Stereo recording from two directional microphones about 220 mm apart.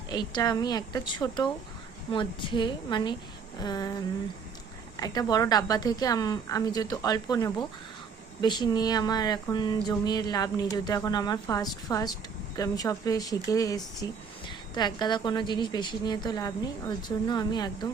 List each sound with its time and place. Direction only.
0.1 s a woman's voice: 20° left (ahead or behind)
4.9 s a woman's voice: 15° left (ahead or behind)